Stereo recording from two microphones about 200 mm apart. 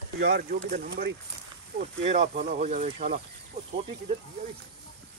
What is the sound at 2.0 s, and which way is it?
Speech, 35° right (ahead or behind).